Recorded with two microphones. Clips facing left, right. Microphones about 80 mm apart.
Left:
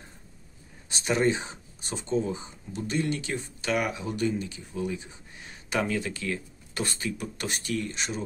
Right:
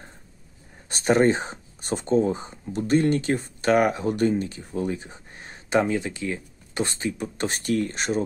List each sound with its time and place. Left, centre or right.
0.8 s speech: right